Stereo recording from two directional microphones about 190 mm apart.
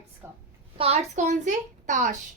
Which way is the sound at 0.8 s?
35° right (ahead or behind).